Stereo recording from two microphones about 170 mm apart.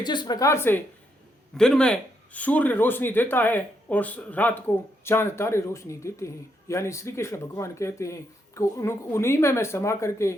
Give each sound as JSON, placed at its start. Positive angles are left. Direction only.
{"t": 0.0, "sound": "speech", "side_deg": 25}
{"t": 1.5, "sound": "speech", "side_deg": 5}